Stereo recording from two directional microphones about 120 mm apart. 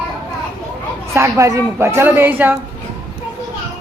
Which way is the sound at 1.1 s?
25° right (ahead or behind).